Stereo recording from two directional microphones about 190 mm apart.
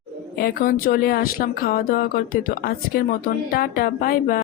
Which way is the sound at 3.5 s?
50° left (ahead or behind).